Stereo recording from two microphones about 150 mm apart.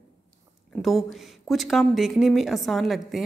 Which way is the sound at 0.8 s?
Centre (ahead or behind).